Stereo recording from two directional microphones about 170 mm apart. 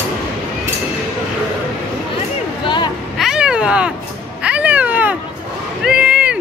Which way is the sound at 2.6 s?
25° left (ahead or behind).